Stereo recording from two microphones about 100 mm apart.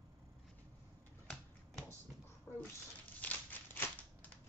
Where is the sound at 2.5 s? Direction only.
30° left (ahead or behind).